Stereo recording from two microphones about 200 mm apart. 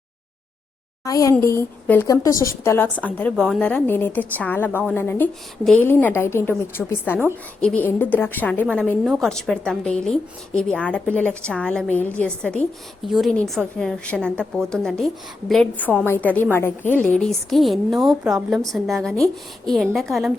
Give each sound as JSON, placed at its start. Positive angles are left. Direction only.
{"t": 1.0, "sound": "a woman's voice", "side_deg": 15}